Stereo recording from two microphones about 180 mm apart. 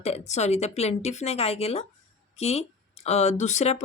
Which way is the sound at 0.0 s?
35° left (ahead or behind).